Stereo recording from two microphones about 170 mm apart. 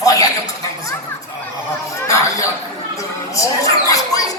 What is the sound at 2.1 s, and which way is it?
Speech, 20° left (ahead or behind).